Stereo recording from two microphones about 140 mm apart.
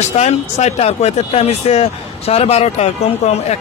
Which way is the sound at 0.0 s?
55° left (ahead or behind).